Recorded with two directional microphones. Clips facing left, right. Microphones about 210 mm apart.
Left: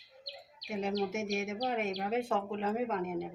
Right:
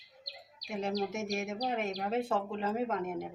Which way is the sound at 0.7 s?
Centre (ahead or behind).